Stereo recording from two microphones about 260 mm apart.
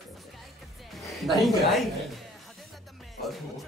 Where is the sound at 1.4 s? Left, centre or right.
Centre.